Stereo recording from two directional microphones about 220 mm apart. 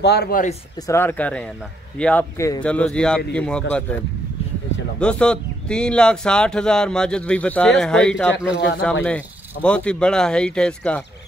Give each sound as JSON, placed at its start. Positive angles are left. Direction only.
{"t": 0.0, "sound": "speech", "side_deg": 45}
{"t": 0.8, "sound": "a man's voice", "side_deg": 10}
{"t": 5.0, "sound": "a man's voice", "side_deg": 5}
{"t": 8.5, "sound": "speech", "side_deg": 50}
{"t": 9.0, "sound": "a man's voice", "side_deg": 5}